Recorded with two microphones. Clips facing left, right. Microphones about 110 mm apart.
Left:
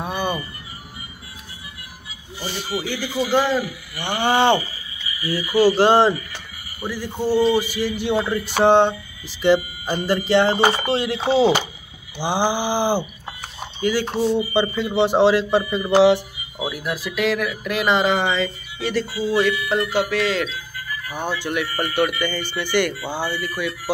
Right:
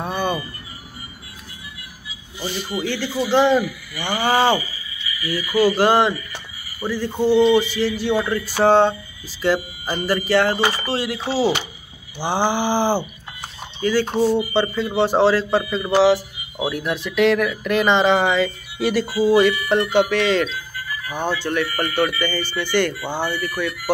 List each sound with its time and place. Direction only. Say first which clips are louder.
0.0 s a sound: right 1 dB; 15° left (ahead or behind)
2.8 s speech: right 3 dB; 15° left (ahead or behind)
3.1 s a man's voice: right 3 dB; 25° right (ahead or behind)
4.0 s speech: even; 25° left (ahead or behind)
4.6 s speech: left 1 dB; 45° left (ahead or behind)
5.2 s speech: left 1 dB; 30° left (ahead or behind)
6.8 s speech: right 4 dB; 15° right (ahead or behind)
7.2 s speech: right 3 dB; 10° left (ahead or behind)
14.1 s speech: right 3 dB; 10° right (ahead or behind)
14.5 s speech: even; 15° left (ahead or behind)
16.7 s speech: right 5 dB; 5° left (ahead or behind)
21.3 s speech: right 2 dB; 10° left (ahead or behind)